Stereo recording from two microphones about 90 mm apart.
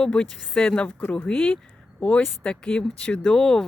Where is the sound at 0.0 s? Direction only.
10° left (ahead or behind).